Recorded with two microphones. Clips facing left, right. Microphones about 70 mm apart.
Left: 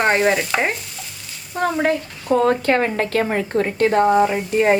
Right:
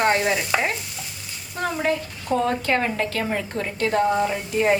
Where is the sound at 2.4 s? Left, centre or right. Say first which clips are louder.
Left 5 dB; left.